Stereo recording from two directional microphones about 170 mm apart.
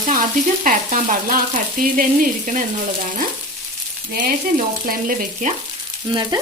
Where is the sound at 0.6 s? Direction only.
50° right (ahead or behind).